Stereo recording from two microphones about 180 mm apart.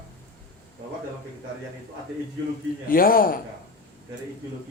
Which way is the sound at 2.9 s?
55° left (ahead or behind).